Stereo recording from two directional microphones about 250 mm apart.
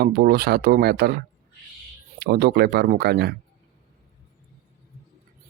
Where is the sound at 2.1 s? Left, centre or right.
Right.